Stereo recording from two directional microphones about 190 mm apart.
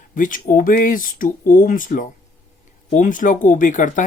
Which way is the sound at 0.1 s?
45° left (ahead or behind).